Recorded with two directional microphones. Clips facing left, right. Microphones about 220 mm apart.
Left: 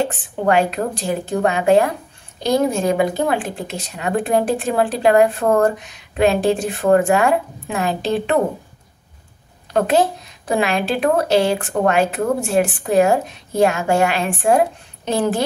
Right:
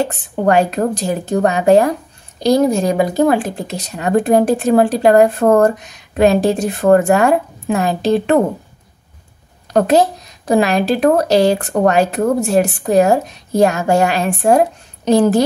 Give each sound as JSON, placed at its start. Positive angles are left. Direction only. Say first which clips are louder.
{"t": 0.0, "sound": "speech", "louder": "right 3 dB", "side_deg": -40}
{"t": 9.7, "sound": "speech", "louder": "right 4 dB", "side_deg": -40}